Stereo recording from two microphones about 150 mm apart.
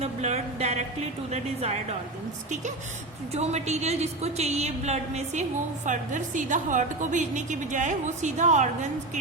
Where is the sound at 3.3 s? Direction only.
45° right (ahead or behind).